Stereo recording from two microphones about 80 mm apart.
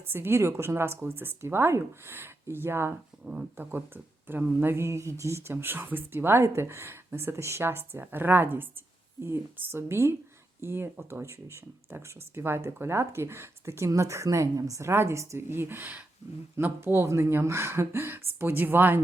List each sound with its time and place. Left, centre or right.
0.1 s a woman's voice: right